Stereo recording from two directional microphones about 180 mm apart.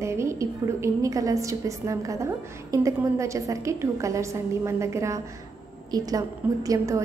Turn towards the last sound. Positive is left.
turn(degrees=-20)  # may be behind; listen again after turning